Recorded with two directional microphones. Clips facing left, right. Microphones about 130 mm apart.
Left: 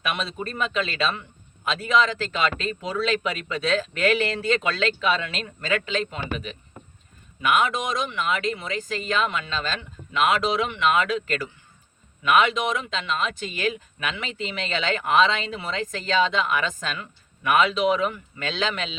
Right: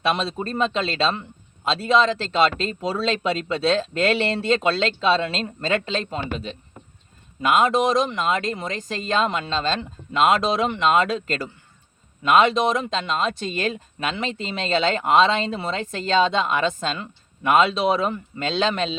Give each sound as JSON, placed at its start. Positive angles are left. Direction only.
{"t": 0.0, "sound": "speech", "side_deg": -30}